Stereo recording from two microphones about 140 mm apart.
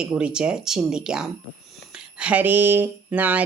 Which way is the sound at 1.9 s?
5° right (ahead or behind).